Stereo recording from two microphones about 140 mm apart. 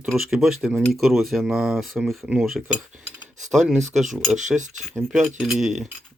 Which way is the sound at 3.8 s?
55° right (ahead or behind).